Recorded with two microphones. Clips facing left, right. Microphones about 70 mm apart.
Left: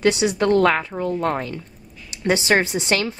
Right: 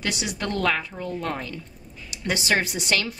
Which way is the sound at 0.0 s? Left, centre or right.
Left.